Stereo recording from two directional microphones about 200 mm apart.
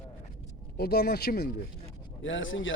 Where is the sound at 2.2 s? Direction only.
70° left (ahead or behind).